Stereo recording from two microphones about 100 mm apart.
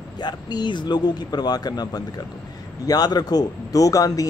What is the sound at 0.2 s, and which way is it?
Speech, 45° left (ahead or behind).